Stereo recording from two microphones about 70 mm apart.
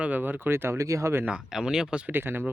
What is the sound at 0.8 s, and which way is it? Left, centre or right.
Speech, right.